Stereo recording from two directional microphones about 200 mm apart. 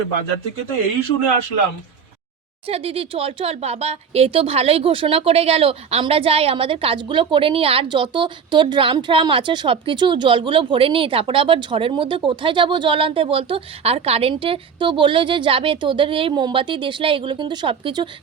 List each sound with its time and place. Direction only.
2.6 s speech: 30° right (ahead or behind)